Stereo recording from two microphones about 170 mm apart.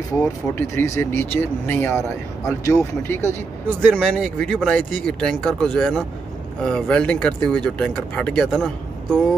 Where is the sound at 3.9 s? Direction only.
5° left (ahead or behind).